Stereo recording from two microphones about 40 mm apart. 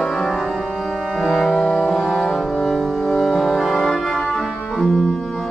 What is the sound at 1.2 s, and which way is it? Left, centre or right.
Music, centre.